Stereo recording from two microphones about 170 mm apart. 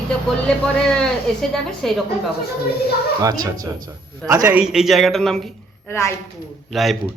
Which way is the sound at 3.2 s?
20° right (ahead or behind).